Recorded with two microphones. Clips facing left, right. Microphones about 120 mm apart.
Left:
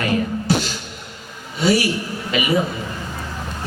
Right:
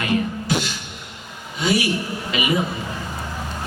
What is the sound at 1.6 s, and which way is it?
Speech, 40° left (ahead or behind).